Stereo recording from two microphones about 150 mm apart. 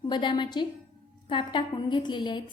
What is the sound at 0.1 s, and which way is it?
A woman's voice, 30° left (ahead or behind).